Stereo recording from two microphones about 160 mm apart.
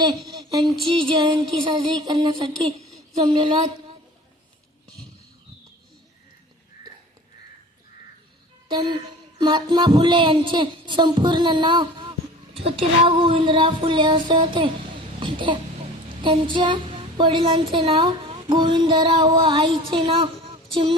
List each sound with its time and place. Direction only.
0.3 s speech: 25° right (ahead or behind)
2.8 s a sound: centre (ahead or behind)
3.3 s a woman's voice: 30° right (ahead or behind)
8.7 s a woman's voice: 30° right (ahead or behind)